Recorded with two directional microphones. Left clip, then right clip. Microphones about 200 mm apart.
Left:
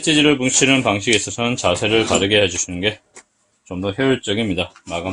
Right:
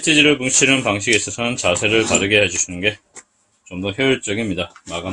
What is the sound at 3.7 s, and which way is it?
Speech, 15° left (ahead or behind).